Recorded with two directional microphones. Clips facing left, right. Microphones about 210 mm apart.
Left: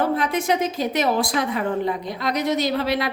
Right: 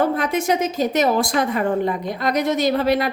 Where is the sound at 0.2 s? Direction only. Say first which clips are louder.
Right 2 dB; 45° right (ahead or behind).